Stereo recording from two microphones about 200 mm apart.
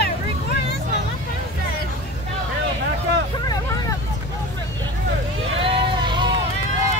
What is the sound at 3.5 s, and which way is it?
Hubbub, 15° left (ahead or behind).